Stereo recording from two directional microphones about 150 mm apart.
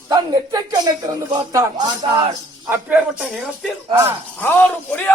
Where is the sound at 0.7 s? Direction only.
25° right (ahead or behind).